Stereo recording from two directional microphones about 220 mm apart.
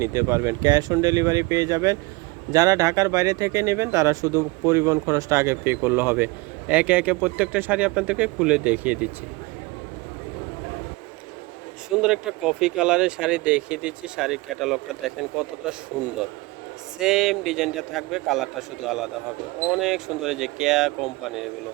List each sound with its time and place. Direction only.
0.0 s speech: 10° right (ahead or behind)
11.9 s speech: 5° right (ahead or behind)
17.0 s speech: centre (ahead or behind)